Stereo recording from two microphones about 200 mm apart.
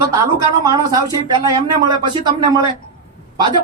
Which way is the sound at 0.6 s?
20° right (ahead or behind).